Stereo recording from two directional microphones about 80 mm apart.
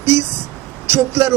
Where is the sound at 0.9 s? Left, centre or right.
Right.